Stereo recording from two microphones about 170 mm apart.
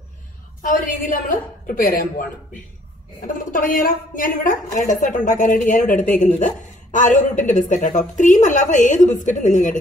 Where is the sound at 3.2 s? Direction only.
55° left (ahead or behind).